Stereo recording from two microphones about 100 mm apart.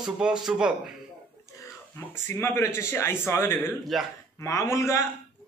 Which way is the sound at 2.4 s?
25° left (ahead or behind).